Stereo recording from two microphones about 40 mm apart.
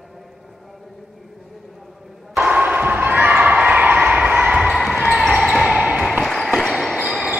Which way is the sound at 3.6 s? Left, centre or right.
Right.